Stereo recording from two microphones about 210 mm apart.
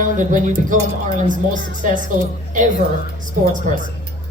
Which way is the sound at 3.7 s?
40° right (ahead or behind).